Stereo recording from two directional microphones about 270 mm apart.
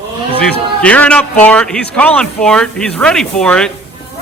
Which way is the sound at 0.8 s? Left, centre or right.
Centre.